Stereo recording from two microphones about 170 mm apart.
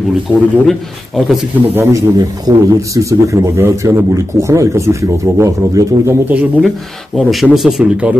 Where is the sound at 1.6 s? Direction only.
15° right (ahead or behind).